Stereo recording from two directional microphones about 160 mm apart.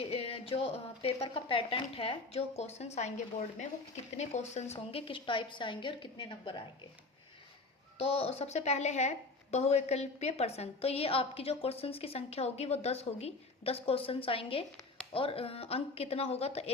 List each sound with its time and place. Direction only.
0.0 s speech: 35° left (ahead or behind)
4.2 s speech: 45° left (ahead or behind)
7.9 s speech: 40° left (ahead or behind)